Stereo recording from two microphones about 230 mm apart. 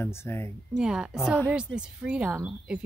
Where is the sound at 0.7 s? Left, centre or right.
Centre.